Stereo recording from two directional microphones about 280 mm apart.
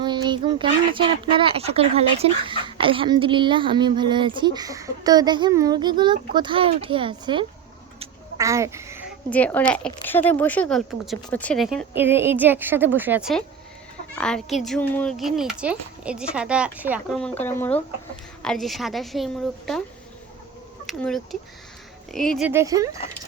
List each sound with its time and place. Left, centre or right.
0.0 s speech: centre
7.9 s a sound: centre
9.3 s speech: centre
20.8 s speech: centre